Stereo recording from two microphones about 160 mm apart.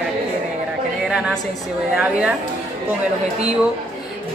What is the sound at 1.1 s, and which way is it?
A woman's voice, 5° right (ahead or behind).